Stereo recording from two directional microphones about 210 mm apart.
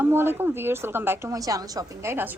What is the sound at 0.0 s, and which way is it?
A woman's voice, 10° right (ahead or behind).